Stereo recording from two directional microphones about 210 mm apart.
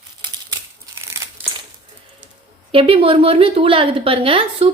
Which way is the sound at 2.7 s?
25° right (ahead or behind).